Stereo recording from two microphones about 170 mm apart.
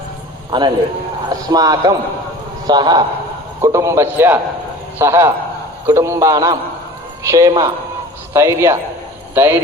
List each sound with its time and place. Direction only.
0.5 s a man's voice: 25° right (ahead or behind)